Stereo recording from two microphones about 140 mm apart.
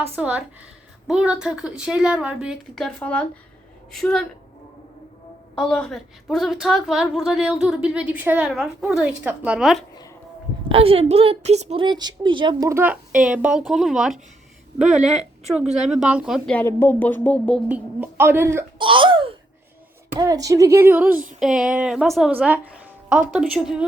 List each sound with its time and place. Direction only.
0.2 s a woman's voice: 10° right (ahead or behind)
3.0 s a woman's voice: 10° left (ahead or behind)
5.5 s a woman's voice: 5° left (ahead or behind)
10.7 s a woman's voice: 45° right (ahead or behind)
11.8 s speech: 30° right (ahead or behind)
12.6 s a woman's voice: 15° right (ahead or behind)
16.5 s speech: 15° left (ahead or behind)
17.7 s speech: 10° right (ahead or behind)
18.8 s speech: 35° right (ahead or behind)
20.1 s speech: 25° right (ahead or behind)
21.1 s female singing: 85° right
21.3 s a woman's voice: 5° right (ahead or behind)
22.3 s speech: 10° right (ahead or behind)